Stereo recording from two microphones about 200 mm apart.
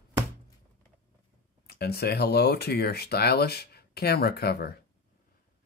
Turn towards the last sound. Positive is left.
turn(degrees=50)  # may be behind; listen again after turning